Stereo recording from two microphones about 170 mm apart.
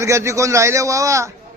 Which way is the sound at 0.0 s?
15° right (ahead or behind).